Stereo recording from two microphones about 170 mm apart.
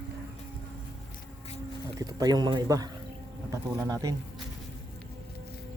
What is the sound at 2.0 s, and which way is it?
Speech, 20° right (ahead or behind).